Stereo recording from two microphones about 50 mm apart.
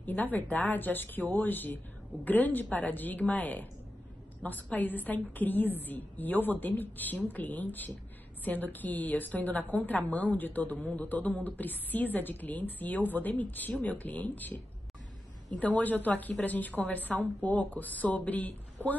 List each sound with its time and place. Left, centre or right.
0.0 s a woman's voice: left